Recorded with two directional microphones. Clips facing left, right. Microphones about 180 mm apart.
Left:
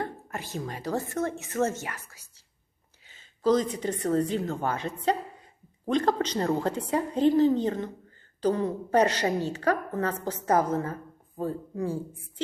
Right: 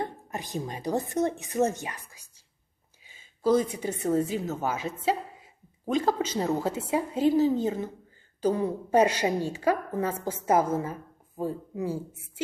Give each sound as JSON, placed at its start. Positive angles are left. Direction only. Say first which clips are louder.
{"t": 0.0, "sound": "speech", "louder": "even", "side_deg": -15}